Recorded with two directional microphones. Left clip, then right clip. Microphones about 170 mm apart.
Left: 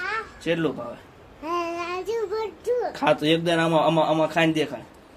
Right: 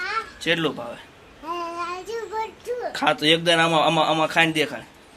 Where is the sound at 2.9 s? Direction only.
5° left (ahead or behind).